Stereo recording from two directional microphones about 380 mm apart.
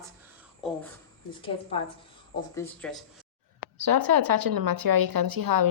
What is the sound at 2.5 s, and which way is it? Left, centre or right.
Speech, centre.